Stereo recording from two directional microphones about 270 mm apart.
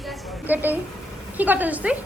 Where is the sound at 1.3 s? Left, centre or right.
Centre.